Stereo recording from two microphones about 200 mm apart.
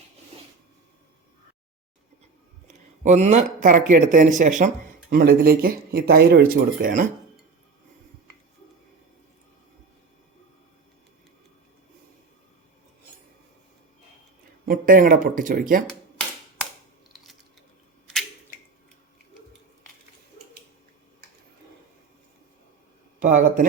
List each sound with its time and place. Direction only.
3.0 s speech: 35° right (ahead or behind)
14.7 s speech: 45° right (ahead or behind)
23.2 s speech: 40° right (ahead or behind)